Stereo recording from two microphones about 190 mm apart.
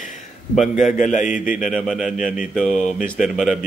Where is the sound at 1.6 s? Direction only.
Centre (ahead or behind).